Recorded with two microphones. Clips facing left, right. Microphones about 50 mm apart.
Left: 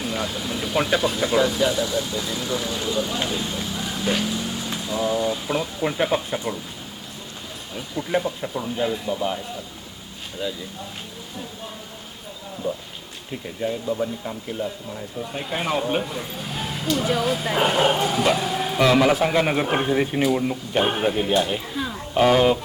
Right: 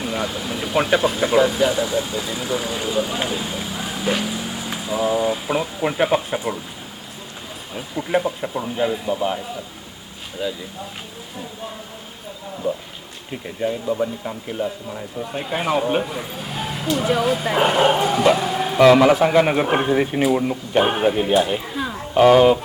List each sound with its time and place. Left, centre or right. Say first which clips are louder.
0.0 s speech: right 2 dB; centre
7.7 s speech: right 3 dB; centre
10.4 s speech: right 3 dB; centre
12.6 s speech: right 3 dB; right